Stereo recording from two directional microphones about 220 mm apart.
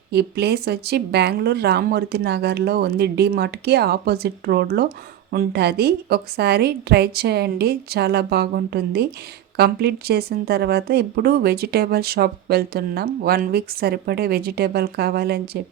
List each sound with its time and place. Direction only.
0.1 s speech: 50° right (ahead or behind)